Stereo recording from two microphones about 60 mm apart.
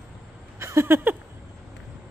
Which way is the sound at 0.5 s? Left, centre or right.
Right.